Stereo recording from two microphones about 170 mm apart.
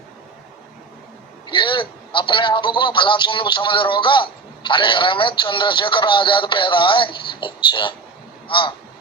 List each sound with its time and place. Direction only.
1.5 s a man's voice: 30° left (ahead or behind)